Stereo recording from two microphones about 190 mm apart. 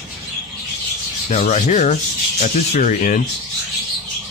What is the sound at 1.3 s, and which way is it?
Rub, 35° left (ahead or behind).